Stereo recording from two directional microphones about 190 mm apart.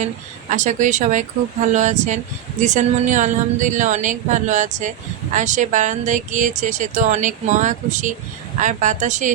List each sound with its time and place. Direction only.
0.5 s speech: 40° right (ahead or behind)